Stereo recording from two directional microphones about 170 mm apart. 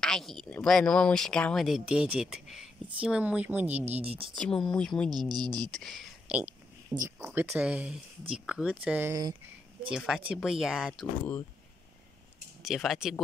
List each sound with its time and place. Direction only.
0.0 s speech: centre (ahead or behind)
4.0 s speech: 35° right (ahead or behind)
4.4 s speech: 5° left (ahead or behind)
5.3 s speech: 25° right (ahead or behind)
5.7 s a sound: centre (ahead or behind)
7.4 s speech: 5° right (ahead or behind)
12.6 s speech: centre (ahead or behind)